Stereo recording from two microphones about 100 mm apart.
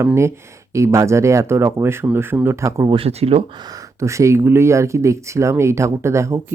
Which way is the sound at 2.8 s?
65° right (ahead or behind).